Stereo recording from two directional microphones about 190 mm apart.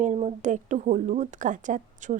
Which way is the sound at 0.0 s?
35° right (ahead or behind).